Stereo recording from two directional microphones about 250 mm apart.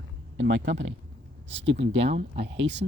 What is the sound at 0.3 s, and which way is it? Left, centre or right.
Speech, right.